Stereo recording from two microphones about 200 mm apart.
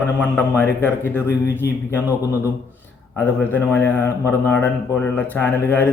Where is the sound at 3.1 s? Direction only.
10° left (ahead or behind).